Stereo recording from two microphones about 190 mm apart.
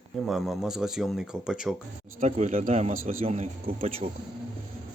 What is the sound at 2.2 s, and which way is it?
Speech, 35° right (ahead or behind).